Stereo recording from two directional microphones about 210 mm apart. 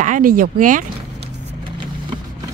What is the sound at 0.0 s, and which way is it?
Speech, 40° right (ahead or behind).